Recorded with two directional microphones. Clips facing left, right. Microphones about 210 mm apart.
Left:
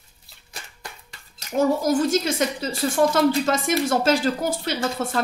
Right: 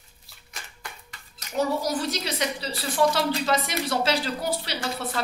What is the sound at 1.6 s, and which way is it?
A woman's voice, 50° left (ahead or behind).